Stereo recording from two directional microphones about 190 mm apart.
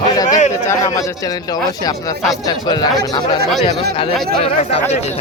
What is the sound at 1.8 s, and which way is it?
Speech, 20° left (ahead or behind).